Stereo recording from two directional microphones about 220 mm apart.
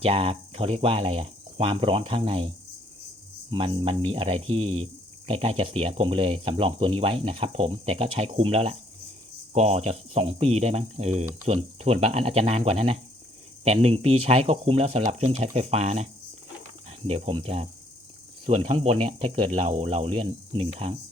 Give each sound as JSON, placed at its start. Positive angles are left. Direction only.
{"t": 0.0, "sound": "speech", "side_deg": -25}
{"t": 3.5, "sound": "speech", "side_deg": -25}
{"t": 17.1, "sound": "speech", "side_deg": -25}